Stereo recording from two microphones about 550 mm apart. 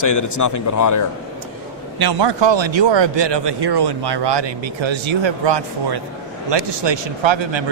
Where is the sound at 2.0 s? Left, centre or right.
Right.